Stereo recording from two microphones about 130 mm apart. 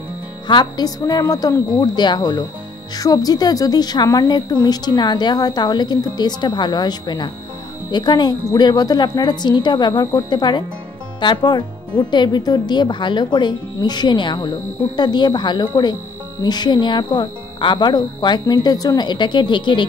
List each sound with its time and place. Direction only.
0.5 s a woman's voice: 35° left (ahead or behind)